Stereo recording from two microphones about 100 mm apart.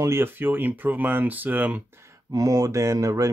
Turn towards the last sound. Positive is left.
turn(degrees=-35)  # may be behind; listen again after turning